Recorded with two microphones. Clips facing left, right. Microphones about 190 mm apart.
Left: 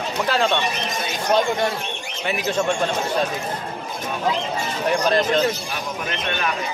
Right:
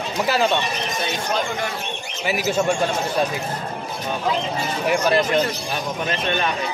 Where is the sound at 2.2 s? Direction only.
5° right (ahead or behind).